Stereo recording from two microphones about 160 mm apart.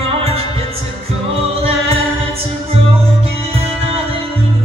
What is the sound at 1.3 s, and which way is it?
Music, 40° right (ahead or behind).